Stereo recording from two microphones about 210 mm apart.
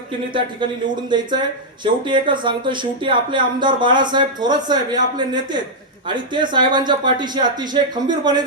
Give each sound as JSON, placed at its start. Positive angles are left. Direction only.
{"t": 0.3, "sound": "speech", "side_deg": -20}